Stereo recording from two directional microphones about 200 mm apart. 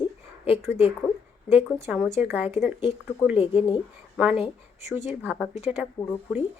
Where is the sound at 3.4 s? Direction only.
25° left (ahead or behind).